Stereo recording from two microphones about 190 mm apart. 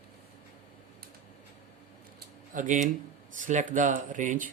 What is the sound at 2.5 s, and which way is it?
A man's voice, 40° right (ahead or behind).